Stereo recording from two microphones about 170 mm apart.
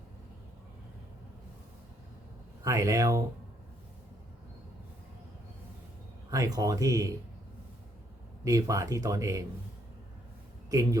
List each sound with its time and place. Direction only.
2.6 s speech: 20° right (ahead or behind)
6.3 s speech: 20° right (ahead or behind)
8.4 s speech: 20° right (ahead or behind)